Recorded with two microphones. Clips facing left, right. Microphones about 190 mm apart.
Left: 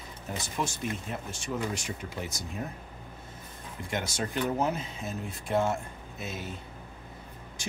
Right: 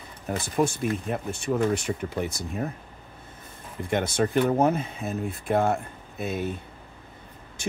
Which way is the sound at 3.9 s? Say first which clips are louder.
Right 9 dB; 55° right (ahead or behind).